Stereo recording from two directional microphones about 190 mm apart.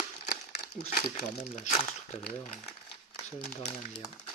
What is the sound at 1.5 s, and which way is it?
Speech, 35° left (ahead or behind).